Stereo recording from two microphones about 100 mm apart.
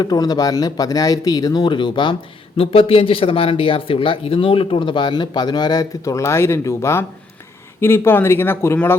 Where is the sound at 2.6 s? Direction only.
70° left (ahead or behind).